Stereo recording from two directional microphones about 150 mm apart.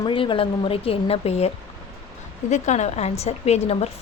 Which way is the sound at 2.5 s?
50° left (ahead or behind).